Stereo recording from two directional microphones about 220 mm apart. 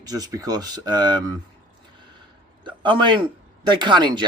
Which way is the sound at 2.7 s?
20° right (ahead or behind).